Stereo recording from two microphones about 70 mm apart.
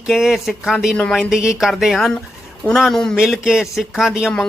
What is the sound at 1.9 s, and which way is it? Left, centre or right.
Speech, centre.